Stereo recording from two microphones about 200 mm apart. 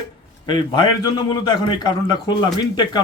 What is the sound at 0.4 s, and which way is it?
A man's voice, 20° left (ahead or behind).